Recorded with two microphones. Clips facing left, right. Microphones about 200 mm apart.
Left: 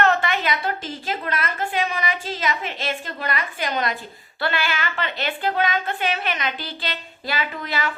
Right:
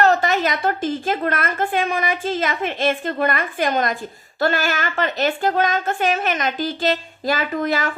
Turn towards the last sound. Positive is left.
turn(degrees=-45)  # may be behind; listen again after turning